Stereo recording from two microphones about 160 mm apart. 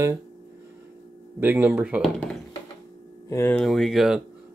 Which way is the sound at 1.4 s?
10° right (ahead or behind).